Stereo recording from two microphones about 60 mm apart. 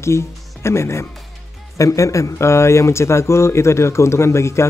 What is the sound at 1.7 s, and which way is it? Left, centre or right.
Speech, left.